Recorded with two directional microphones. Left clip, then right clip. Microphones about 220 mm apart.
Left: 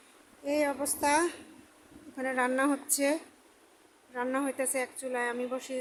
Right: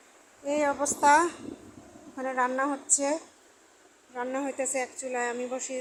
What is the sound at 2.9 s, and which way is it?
Speech, 20° left (ahead or behind).